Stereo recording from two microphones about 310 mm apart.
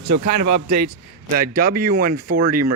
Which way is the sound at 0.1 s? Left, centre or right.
Right.